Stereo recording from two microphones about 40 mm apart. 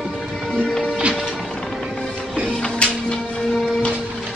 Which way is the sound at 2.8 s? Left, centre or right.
Left.